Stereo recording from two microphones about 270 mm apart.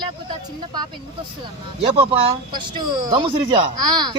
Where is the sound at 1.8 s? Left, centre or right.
Right.